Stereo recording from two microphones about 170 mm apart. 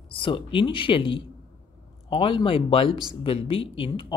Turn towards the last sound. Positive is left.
turn(degrees=30)  # may be behind; listen again after turning